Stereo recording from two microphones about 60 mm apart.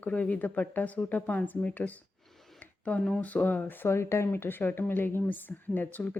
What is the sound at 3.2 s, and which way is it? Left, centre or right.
A woman's voice, left.